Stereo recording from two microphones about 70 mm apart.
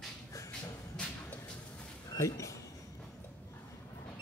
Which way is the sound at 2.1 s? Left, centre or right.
Left.